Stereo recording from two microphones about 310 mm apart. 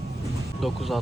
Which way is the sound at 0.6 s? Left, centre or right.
Centre.